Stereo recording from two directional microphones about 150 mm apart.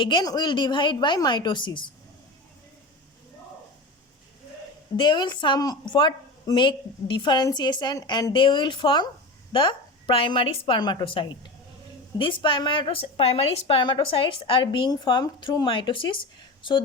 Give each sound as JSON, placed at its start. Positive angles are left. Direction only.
{"t": 0.0, "sound": "a woman's voice", "side_deg": 30}
{"t": 4.9, "sound": "a woman's voice", "side_deg": 30}